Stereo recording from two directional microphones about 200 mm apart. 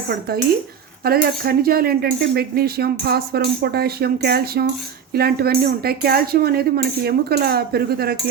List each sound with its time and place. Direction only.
1.0 s speech: 50° right (ahead or behind)